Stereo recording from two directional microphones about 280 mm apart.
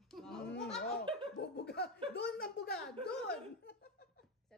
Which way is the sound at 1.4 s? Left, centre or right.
Left.